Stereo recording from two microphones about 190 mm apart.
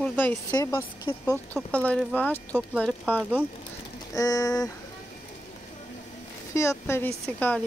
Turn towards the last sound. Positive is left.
turn(degrees=5)  # may be behind; listen again after turning